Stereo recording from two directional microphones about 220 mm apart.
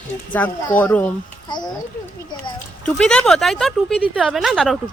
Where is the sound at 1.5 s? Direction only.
20° left (ahead or behind).